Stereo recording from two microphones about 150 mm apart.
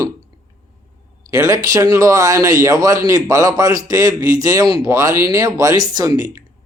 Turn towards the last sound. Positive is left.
turn(degrees=-25)  # may be behind; listen again after turning